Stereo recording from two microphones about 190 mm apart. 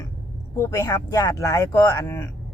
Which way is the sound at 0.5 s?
15° left (ahead or behind).